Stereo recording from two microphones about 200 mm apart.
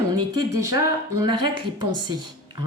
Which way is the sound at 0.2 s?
15° right (ahead or behind).